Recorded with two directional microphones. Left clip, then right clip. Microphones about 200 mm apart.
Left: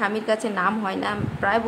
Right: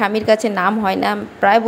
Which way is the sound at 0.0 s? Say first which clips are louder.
Right 8 dB; 30° right (ahead or behind).